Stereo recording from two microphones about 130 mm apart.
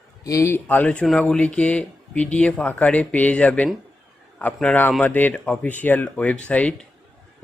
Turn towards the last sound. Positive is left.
turn(degrees=10)  # may be behind; listen again after turning